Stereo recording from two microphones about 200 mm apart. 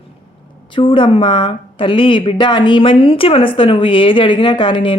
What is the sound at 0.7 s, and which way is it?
Speech, 25° left (ahead or behind).